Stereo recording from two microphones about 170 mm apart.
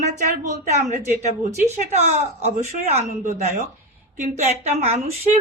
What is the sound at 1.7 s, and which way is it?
A woman's voice, 40° right (ahead or behind).